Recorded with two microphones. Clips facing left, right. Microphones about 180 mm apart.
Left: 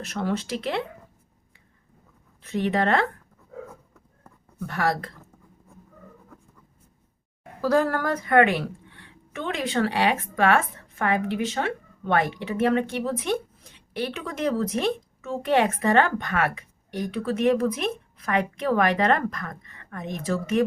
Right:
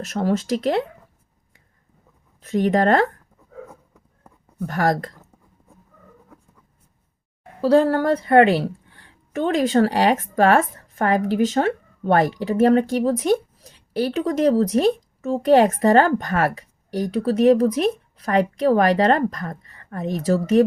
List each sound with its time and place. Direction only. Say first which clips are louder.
0.0 s a woman's voice: right 6 dB; 40° right (ahead or behind)
2.4 s a woman's voice: right 6 dB; 40° right (ahead or behind)
4.6 s a woman's voice: right 5 dB; 40° right (ahead or behind)
7.6 s a woman's voice: right 6 dB; 30° right (ahead or behind)